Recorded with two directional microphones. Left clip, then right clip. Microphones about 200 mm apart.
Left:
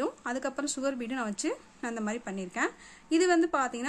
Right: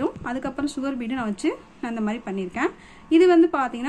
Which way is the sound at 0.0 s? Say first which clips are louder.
Right 5 dB; 35° left (ahead or behind).